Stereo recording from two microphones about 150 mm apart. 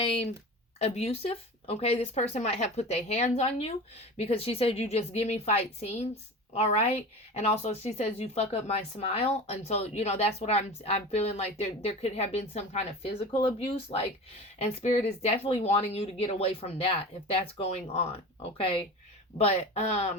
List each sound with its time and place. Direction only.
0.0 s speech: 40° left (ahead or behind)
19.4 s speech: 45° left (ahead or behind)